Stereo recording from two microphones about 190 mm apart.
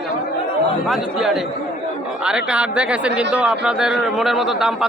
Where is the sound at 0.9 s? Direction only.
Centre (ahead or behind).